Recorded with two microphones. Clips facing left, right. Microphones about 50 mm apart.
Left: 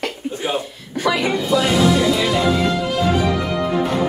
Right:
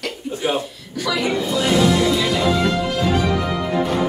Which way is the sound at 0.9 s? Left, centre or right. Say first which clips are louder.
Left 3 dB; left.